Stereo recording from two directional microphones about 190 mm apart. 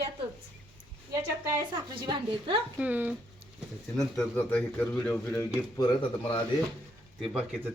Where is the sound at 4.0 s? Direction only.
5° left (ahead or behind).